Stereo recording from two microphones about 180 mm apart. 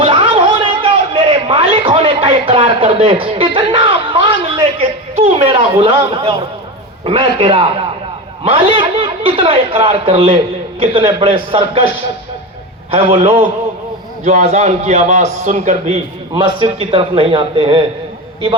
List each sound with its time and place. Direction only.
0.0 s a sound: 30° right (ahead or behind)
4.8 s a man's voice: 35° right (ahead or behind)
12.9 s a man's voice: 35° right (ahead or behind)
16.3 s a man's voice: 25° right (ahead or behind)